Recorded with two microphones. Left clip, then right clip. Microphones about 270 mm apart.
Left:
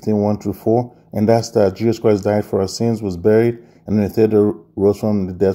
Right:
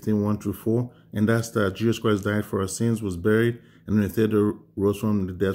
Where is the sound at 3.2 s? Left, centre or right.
Left.